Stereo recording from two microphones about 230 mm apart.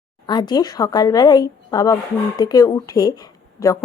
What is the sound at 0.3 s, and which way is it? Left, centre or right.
Speech, centre.